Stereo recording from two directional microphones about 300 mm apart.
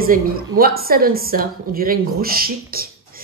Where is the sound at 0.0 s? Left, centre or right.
Right.